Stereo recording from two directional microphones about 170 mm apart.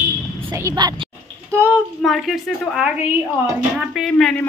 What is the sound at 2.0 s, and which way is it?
A woman's voice, centre (ahead or behind).